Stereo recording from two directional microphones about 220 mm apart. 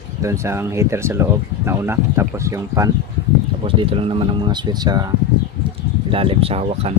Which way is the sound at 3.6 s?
25° right (ahead or behind).